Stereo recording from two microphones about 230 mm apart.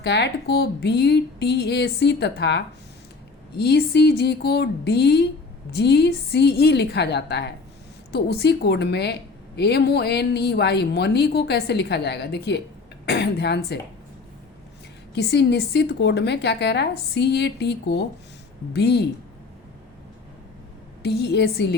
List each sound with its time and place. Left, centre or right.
0.0 s speech: left
15.1 s speech: left
21.0 s speech: left